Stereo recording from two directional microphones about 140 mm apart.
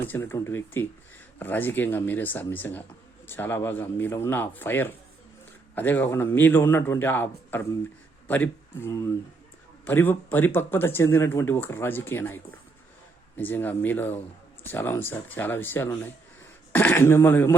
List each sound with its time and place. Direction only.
0.1 s speech: 15° left (ahead or behind)